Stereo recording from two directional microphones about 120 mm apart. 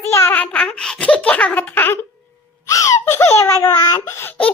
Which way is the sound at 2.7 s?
25° left (ahead or behind).